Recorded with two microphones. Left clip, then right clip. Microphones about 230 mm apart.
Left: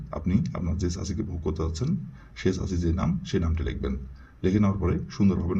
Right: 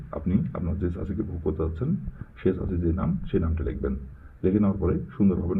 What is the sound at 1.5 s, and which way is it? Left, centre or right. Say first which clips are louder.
A man's voice: right 2 dB; centre.